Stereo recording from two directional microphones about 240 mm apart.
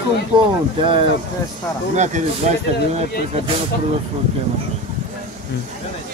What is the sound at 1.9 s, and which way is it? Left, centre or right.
Speech, right.